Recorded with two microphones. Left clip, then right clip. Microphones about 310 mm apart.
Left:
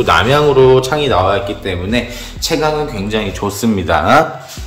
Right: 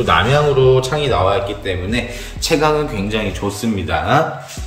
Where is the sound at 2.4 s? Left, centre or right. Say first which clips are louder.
Even; centre.